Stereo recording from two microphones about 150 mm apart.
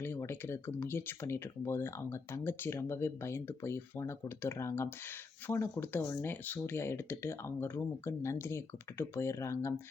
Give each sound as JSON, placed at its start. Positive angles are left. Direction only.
{"t": 0.0, "sound": "speech", "side_deg": 15}